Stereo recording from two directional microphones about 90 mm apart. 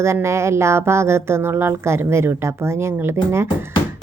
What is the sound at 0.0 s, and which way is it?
A woman's voice, 30° right (ahead or behind).